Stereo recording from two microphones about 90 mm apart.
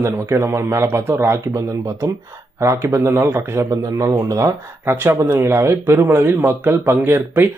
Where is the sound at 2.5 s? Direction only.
30° right (ahead or behind).